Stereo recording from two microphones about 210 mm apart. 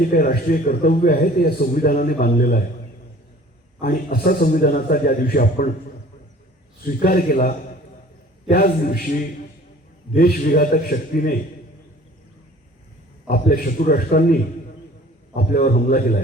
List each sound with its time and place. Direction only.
0.0 s a man's voice: 40° left (ahead or behind)
3.8 s a man's voice: 45° left (ahead or behind)
6.8 s a man's voice: 45° left (ahead or behind)
13.2 s a man's voice: 40° left (ahead or behind)
15.4 s a man's voice: 40° left (ahead or behind)